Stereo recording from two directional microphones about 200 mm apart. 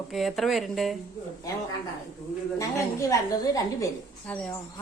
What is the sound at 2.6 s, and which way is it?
Speech, 15° left (ahead or behind).